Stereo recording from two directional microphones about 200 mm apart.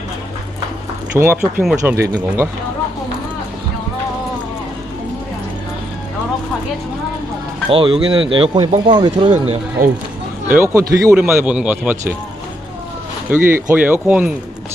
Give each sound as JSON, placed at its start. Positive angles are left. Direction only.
{"t": 1.2, "sound": "a man's voice", "side_deg": -10}
{"t": 7.7, "sound": "speech", "side_deg": -25}
{"t": 9.3, "sound": "speech", "side_deg": -35}
{"t": 10.5, "sound": "a man's voice", "side_deg": -10}
{"t": 13.3, "sound": "a man's voice", "side_deg": -10}